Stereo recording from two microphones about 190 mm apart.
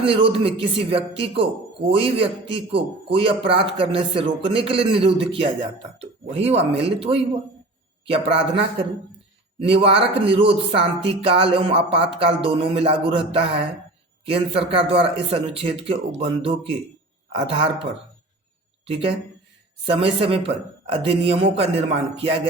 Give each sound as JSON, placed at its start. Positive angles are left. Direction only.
{"t": 0.0, "sound": "a man's voice", "side_deg": -30}
{"t": 18.9, "sound": "a man's voice", "side_deg": -30}